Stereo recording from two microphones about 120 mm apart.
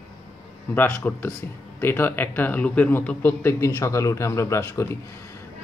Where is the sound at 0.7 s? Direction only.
15° left (ahead or behind).